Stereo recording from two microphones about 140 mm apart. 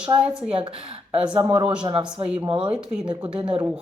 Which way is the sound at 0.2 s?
10° right (ahead or behind).